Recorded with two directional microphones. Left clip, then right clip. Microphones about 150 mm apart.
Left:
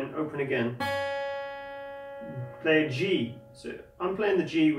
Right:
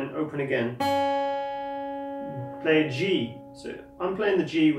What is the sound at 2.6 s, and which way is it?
Speech, 10° right (ahead or behind).